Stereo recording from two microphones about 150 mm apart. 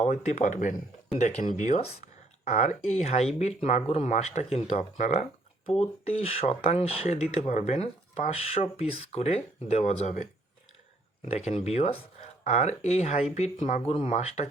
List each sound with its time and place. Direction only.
0.0 s speech: 50° left (ahead or behind)
5.6 s speech: 40° left (ahead or behind)
11.3 s speech: 45° left (ahead or behind)